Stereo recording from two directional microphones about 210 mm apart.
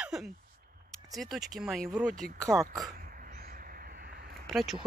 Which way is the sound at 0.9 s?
Centre (ahead or behind).